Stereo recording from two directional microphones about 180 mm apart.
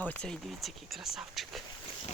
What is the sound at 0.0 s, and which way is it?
Speech, 5° left (ahead or behind).